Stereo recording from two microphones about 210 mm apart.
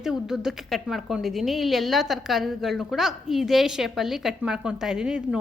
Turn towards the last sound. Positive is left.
turn(degrees=-5)  # may be behind; listen again after turning